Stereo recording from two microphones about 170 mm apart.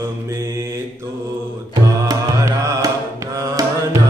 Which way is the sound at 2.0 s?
20° right (ahead or behind).